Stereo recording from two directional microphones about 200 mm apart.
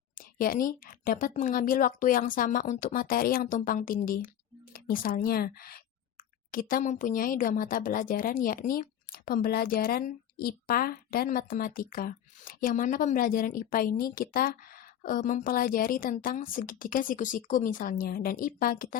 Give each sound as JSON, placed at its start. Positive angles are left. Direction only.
{"t": 0.2, "sound": "speech", "side_deg": 45}